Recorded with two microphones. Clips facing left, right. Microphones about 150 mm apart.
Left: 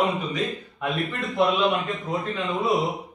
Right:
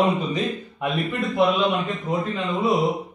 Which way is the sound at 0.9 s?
Centre (ahead or behind).